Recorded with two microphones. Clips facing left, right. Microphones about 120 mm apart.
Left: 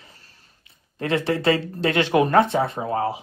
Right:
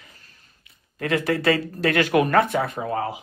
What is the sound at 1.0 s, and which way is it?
Speech, 25° left (ahead or behind).